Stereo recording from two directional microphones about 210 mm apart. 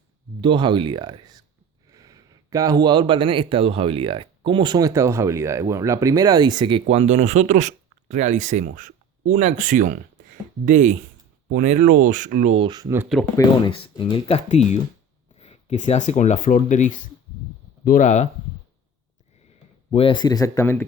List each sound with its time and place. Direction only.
0.4 s speech: 20° right (ahead or behind)
13.7 s speech: 25° left (ahead or behind)
19.9 s speech: 25° left (ahead or behind)